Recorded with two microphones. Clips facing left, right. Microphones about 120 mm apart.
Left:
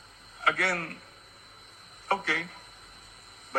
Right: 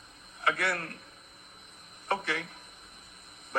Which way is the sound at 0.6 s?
35° left (ahead or behind).